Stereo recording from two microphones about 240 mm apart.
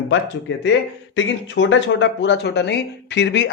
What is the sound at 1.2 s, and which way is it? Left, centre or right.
A man's voice, left.